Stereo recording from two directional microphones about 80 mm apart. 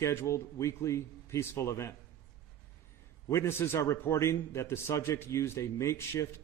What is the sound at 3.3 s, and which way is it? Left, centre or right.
A man's voice, left.